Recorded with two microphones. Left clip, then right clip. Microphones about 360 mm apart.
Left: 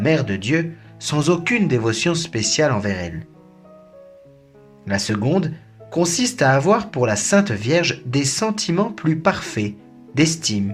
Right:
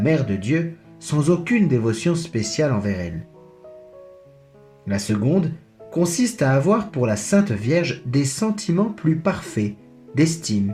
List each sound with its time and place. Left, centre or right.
0.0 s speech: left
4.9 s speech: left